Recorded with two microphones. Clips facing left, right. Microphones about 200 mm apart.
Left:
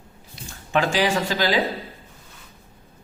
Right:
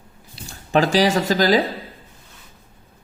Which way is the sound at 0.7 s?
40° right (ahead or behind).